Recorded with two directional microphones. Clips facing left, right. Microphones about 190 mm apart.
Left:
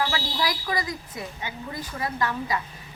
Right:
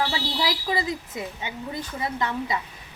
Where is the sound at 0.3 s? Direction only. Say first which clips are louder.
Right 2 dB; 25° right (ahead or behind).